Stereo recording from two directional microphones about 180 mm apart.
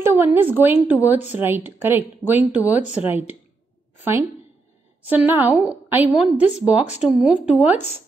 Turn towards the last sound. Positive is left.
turn(degrees=-5)  # may be behind; listen again after turning